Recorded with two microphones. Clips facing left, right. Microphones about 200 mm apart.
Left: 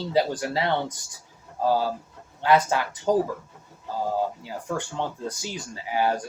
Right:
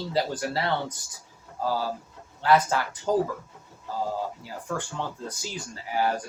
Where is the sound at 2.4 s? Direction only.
15° left (ahead or behind).